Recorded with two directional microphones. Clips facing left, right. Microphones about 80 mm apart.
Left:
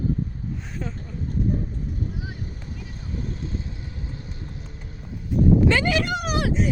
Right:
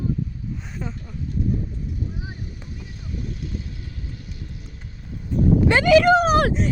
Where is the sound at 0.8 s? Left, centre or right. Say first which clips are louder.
Even; centre.